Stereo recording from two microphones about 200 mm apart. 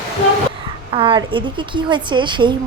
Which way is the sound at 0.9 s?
25° right (ahead or behind).